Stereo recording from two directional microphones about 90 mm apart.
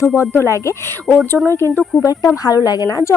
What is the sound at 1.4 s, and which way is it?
Speech, 25° left (ahead or behind).